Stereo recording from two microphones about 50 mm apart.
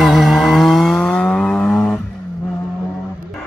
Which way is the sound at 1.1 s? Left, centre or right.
Centre.